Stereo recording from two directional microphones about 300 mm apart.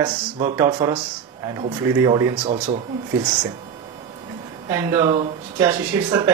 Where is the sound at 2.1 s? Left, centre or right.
Centre.